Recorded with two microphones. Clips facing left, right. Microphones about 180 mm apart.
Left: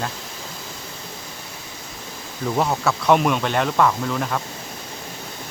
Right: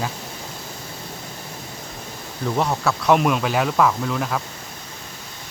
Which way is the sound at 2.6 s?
Centre (ahead or behind).